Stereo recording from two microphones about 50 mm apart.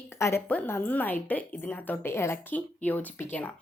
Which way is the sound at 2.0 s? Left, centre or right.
Left.